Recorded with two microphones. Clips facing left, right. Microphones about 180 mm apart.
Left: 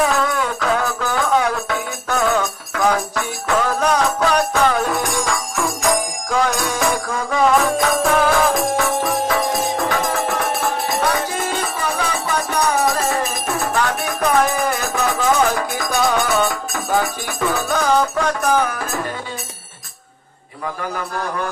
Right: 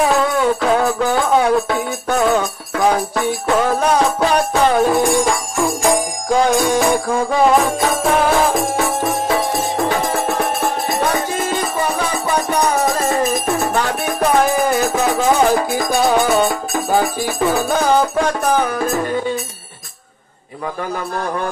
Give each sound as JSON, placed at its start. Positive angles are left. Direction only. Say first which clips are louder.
{"t": 0.1, "sound": "music", "louder": "right 5 dB", "side_deg": -30}
{"t": 13.1, "sound": "music", "louder": "right 5 dB", "side_deg": -30}